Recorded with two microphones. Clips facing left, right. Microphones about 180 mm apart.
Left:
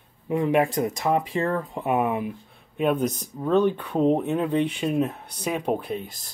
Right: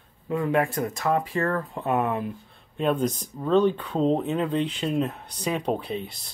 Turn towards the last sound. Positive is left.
turn(degrees=5)  # may be behind; listen again after turning